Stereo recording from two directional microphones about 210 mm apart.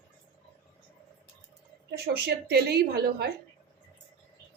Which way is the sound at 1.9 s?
50° right (ahead or behind).